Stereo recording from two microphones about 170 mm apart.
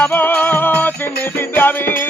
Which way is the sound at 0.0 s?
10° left (ahead or behind).